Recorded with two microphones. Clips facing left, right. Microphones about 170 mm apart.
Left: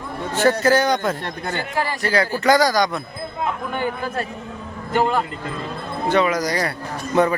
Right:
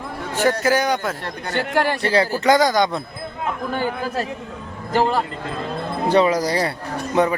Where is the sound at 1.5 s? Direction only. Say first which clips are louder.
Right 6 dB; 75° right (ahead or behind).